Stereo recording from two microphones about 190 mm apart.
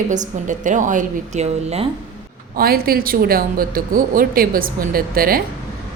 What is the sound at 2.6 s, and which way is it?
Speech, 50° right (ahead or behind).